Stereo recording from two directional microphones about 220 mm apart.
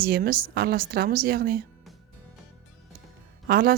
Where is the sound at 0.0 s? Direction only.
40° right (ahead or behind).